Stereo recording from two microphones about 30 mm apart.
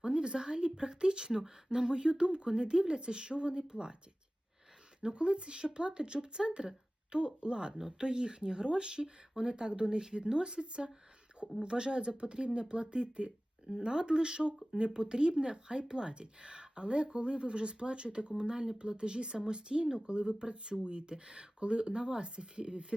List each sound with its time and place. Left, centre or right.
0.0 s a woman's voice: right
4.9 s a woman's voice: right
13.7 s a woman's voice: right